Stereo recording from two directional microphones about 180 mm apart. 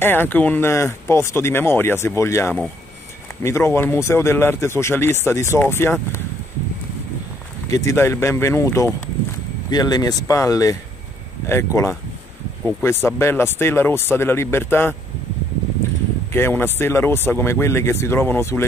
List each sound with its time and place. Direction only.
0.0 s speech: 10° left (ahead or behind)
7.6 s speech: 15° left (ahead or behind)
16.3 s speech: 15° left (ahead or behind)